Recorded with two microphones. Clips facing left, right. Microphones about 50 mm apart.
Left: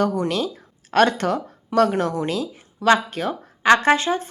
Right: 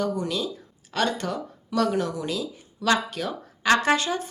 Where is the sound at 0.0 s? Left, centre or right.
Left.